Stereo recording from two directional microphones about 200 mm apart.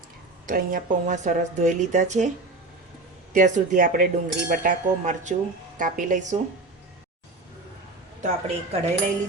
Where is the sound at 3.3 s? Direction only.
40° right (ahead or behind).